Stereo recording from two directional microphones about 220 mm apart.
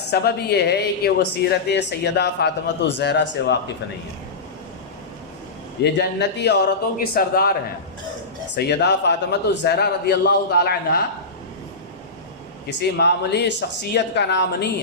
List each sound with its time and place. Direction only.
0.1 s speech: 45° left (ahead or behind)
5.8 s speech: 50° left (ahead or behind)
8.5 s speech: 50° left (ahead or behind)
12.6 s speech: 50° left (ahead or behind)